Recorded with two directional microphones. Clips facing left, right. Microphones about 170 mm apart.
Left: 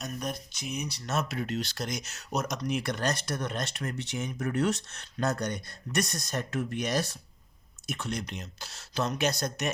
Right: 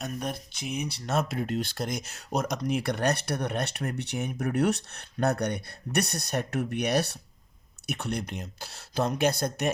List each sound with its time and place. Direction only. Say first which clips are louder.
0.0 s speech: right 2 dB; 55° right (ahead or behind)